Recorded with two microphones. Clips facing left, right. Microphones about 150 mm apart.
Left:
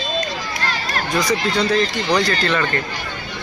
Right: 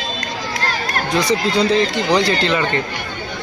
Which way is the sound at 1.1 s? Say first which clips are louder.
Right 2 dB; 25° right (ahead or behind).